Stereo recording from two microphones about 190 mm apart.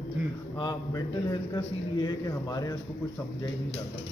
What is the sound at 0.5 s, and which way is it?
A man's voice, 20° left (ahead or behind).